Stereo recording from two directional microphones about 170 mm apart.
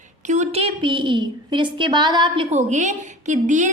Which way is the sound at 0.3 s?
40° right (ahead or behind).